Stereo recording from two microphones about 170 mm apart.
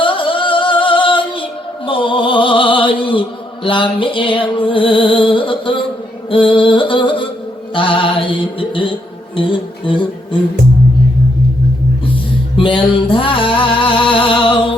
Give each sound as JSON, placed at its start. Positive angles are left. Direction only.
{"t": 0.0, "sound": "music", "side_deg": 30}
{"t": 12.5, "sound": "music", "side_deg": 30}